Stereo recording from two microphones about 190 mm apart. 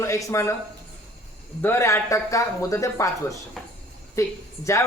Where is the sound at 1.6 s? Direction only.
15° left (ahead or behind).